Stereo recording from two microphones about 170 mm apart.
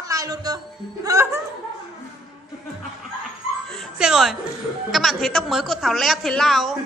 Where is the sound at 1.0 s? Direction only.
15° right (ahead or behind).